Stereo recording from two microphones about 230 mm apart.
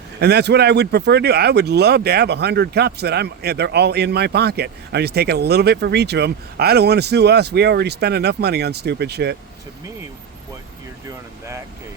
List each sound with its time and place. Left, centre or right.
0.2 s speech: right